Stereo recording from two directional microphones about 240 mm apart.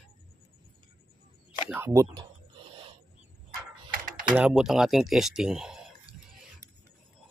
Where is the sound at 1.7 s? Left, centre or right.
Centre.